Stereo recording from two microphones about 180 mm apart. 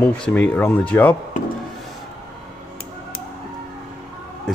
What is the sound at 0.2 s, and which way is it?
Speech, 10° left (ahead or behind).